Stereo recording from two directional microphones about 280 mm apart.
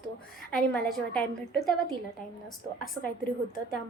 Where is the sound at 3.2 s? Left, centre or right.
Left.